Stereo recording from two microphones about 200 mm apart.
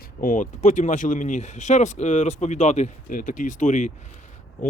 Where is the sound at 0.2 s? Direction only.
40° left (ahead or behind).